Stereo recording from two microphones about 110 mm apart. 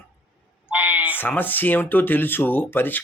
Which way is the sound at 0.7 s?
15° right (ahead or behind).